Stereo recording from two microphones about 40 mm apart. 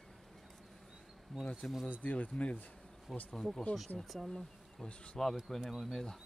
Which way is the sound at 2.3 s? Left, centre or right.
Left.